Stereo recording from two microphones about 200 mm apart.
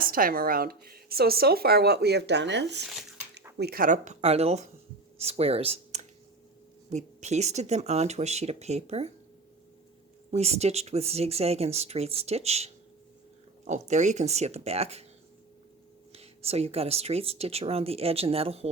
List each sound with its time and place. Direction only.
0.0 s speech: 45° right (ahead or behind)
3.6 s speech: 50° right (ahead or behind); by 9.1 s 30° right (ahead or behind)
10.3 s speech: 30° right (ahead or behind)
16.1 s speech: 30° right (ahead or behind)